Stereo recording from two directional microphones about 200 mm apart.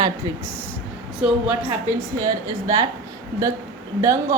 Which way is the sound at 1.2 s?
5° right (ahead or behind).